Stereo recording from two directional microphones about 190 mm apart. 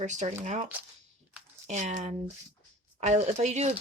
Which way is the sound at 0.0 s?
40° right (ahead or behind).